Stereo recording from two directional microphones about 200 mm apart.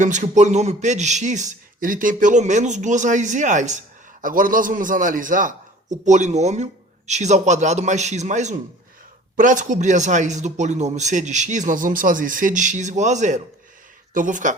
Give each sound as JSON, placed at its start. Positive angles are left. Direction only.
{"t": 0.0, "sound": "a man's voice", "side_deg": -40}